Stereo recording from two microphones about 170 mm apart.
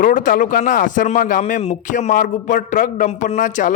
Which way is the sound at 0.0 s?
50° left (ahead or behind).